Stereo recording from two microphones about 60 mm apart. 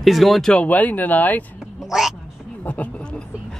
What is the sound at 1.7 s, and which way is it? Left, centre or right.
Cat, centre.